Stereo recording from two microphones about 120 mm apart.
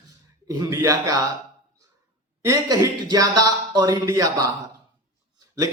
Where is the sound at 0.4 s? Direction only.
25° right (ahead or behind).